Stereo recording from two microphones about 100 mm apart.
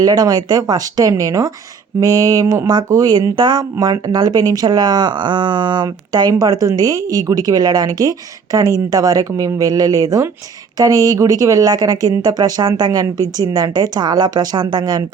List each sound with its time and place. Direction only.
0.0 s speech: 40° right (ahead or behind)